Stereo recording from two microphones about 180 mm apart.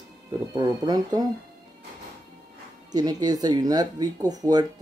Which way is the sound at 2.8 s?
20° right (ahead or behind).